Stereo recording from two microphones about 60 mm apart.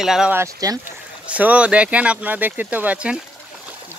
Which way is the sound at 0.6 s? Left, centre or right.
Right.